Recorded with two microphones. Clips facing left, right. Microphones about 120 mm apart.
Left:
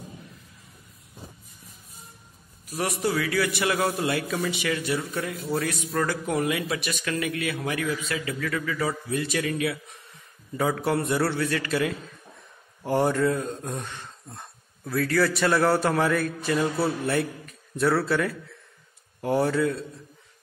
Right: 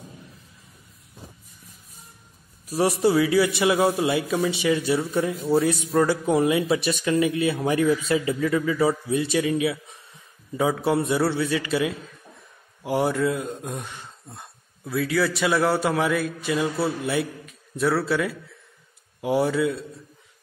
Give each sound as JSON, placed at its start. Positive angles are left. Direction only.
{"t": 2.7, "sound": "speech", "side_deg": -25}
{"t": 4.1, "sound": "a man's voice", "side_deg": -5}
{"t": 4.5, "sound": "a man's voice", "side_deg": -20}
{"t": 10.8, "sound": "a man's voice", "side_deg": -15}
{"t": 11.1, "sound": "a man's voice", "side_deg": -5}